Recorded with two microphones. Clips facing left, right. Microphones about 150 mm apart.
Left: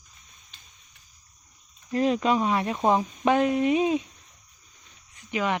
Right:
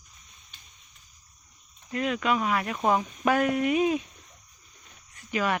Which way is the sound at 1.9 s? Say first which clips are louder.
Left 4 dB; 30° left (ahead or behind).